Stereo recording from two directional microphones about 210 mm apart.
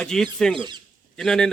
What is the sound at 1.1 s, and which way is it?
Speech, centre (ahead or behind).